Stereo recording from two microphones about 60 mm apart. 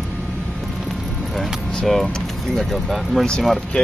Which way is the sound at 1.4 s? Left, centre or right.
Centre.